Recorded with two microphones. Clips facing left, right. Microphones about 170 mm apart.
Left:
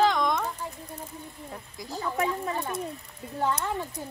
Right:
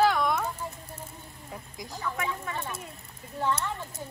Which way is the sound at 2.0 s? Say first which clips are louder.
Left 5 dB; 35° left (ahead or behind).